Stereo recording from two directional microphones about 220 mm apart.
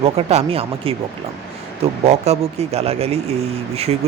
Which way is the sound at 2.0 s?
30° right (ahead or behind).